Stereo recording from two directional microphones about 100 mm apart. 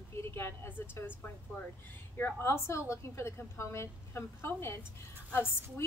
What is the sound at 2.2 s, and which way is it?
A woman's voice, 25° left (ahead or behind).